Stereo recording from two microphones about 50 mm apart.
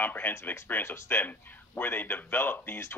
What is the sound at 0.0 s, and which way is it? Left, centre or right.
Speech, left.